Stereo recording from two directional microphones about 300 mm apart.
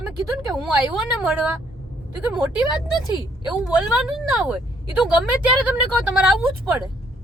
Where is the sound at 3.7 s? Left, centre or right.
Centre.